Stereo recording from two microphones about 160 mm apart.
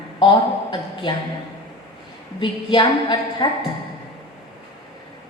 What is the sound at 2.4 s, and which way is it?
A woman's voice, 30° left (ahead or behind).